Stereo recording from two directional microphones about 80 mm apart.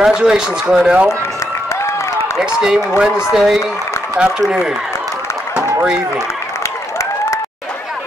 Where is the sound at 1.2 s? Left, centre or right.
Left.